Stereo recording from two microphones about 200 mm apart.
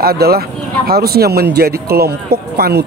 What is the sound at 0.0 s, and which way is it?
Speech, 50° right (ahead or behind).